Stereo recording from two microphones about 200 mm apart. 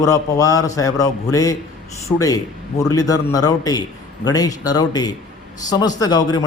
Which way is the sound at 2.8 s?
15° left (ahead or behind).